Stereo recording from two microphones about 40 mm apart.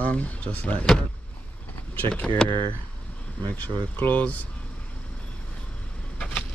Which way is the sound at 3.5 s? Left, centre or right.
Left.